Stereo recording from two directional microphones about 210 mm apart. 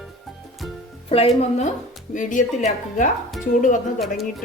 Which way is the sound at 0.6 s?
Centre (ahead or behind).